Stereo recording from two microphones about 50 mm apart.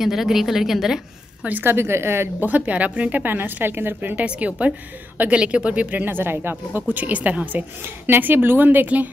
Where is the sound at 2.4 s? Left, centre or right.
Right.